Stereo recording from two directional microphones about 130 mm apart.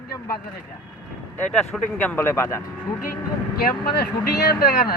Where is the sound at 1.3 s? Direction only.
10° left (ahead or behind).